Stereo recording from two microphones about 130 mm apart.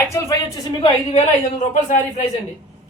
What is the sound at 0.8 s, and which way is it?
A woman's voice, 65° left (ahead or behind).